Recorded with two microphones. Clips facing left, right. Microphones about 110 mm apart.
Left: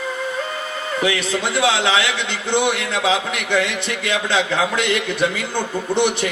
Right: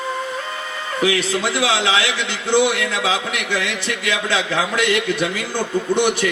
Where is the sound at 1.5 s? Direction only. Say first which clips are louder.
Left 2 dB; 25° left (ahead or behind).